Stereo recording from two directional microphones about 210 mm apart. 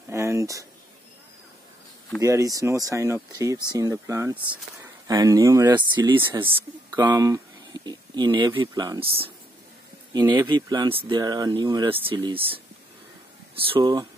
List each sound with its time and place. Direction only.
0.1 s a sound: 15° right (ahead or behind)
2.2 s speech: 15° right (ahead or behind)
12.1 s speech: 25° right (ahead or behind)
13.6 s speech: 20° right (ahead or behind)